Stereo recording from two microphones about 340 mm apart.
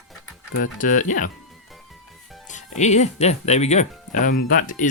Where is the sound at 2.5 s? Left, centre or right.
Left.